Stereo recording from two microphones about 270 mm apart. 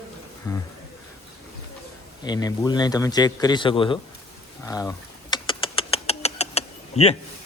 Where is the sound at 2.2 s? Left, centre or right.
Centre.